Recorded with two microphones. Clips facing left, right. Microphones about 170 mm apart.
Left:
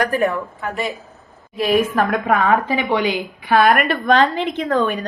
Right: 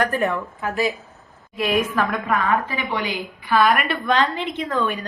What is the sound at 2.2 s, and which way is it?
A woman's voice, 70° left (ahead or behind).